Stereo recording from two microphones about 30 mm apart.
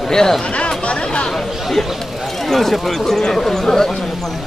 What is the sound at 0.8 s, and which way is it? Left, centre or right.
Chatter, left.